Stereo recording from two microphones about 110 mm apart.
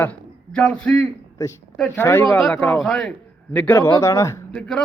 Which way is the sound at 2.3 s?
5° left (ahead or behind).